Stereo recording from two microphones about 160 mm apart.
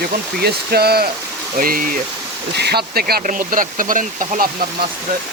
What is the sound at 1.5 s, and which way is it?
Speech, 60° right (ahead or behind).